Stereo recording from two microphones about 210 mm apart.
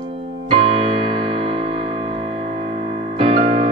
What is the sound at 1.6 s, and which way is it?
Music, 25° right (ahead or behind).